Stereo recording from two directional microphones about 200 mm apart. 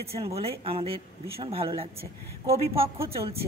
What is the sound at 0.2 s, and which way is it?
Speech, 30° right (ahead or behind).